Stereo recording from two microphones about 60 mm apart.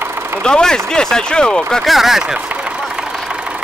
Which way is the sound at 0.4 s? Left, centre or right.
Centre.